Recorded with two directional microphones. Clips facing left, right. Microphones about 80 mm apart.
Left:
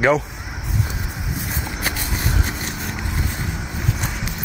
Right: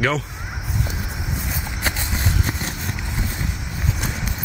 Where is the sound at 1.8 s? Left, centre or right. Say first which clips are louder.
Right 1 dB; right.